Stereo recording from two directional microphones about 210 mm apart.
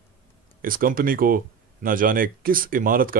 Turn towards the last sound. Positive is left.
turn(degrees=-45)  # may be behind; listen again after turning